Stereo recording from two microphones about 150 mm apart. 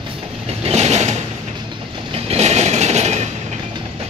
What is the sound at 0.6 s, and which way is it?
Vehicle, 45° right (ahead or behind).